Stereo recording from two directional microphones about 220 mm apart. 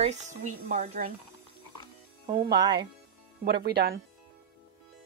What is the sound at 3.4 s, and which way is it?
Speech, 45° right (ahead or behind).